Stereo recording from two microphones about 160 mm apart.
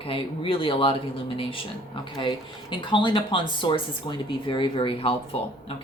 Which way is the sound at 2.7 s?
30° left (ahead or behind).